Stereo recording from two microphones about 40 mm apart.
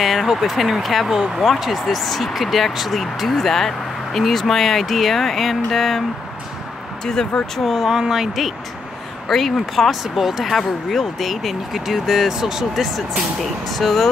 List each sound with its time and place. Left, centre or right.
0.0 s speech: centre
1.1 s speech: centre
1.6 s speech: centre
7.5 s speech: centre
13.4 s speech: centre